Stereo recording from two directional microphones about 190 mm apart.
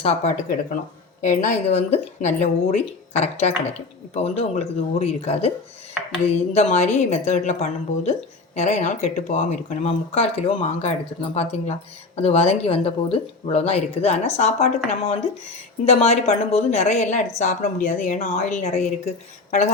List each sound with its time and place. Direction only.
0.0 s speech: 40° left (ahead or behind)
6.5 s speech: 35° left (ahead or behind)